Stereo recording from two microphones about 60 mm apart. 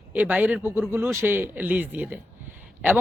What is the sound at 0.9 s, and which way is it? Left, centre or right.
Speech, right.